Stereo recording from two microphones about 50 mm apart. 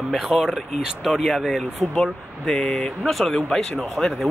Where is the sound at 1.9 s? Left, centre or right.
Centre.